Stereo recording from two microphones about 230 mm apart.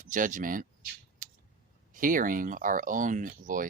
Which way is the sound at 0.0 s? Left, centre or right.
Right.